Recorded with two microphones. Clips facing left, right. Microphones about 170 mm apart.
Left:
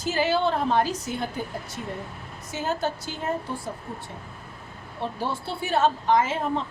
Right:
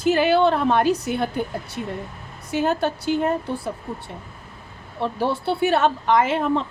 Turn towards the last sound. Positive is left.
turn(degrees=-65)  # may be behind; listen again after turning